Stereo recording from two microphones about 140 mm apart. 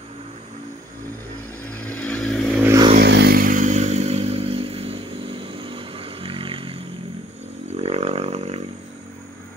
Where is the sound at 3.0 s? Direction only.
85° right; by 8.6 s 50° right (ahead or behind).